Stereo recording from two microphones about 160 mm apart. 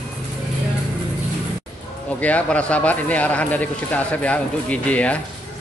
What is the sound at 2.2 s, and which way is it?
Speech, 10° left (ahead or behind).